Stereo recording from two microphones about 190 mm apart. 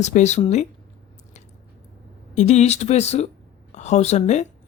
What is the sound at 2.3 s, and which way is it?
Speech, 35° left (ahead or behind).